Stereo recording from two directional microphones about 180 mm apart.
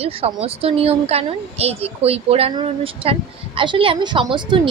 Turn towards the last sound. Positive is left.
turn(degrees=-25)  # may be behind; listen again after turning